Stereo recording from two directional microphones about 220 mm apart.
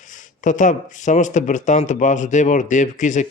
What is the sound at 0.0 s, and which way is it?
A man's voice, 35° left (ahead or behind).